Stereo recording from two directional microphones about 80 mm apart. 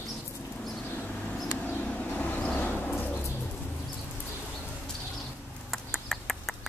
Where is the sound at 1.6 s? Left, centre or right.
Centre.